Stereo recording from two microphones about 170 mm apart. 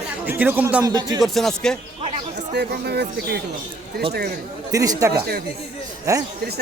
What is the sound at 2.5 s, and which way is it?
Speech, 75° right (ahead or behind).